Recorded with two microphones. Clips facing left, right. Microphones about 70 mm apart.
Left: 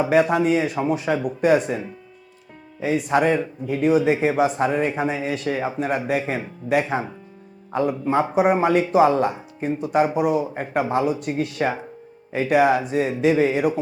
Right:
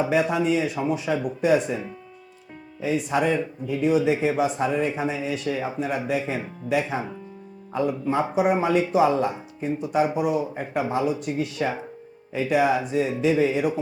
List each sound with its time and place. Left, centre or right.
0.1 s a man's voice: left
2.8 s a man's voice: left